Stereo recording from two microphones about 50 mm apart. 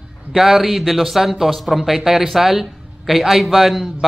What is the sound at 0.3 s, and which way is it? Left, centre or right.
Speech, centre.